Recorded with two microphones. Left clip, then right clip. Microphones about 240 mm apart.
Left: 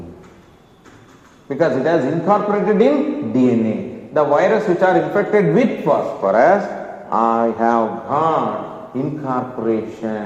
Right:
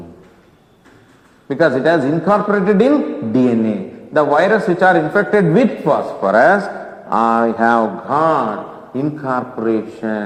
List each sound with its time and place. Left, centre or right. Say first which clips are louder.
1.5 s a man's voice: right 3 dB; right